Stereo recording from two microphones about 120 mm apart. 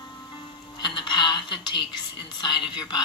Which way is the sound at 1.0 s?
40° left (ahead or behind).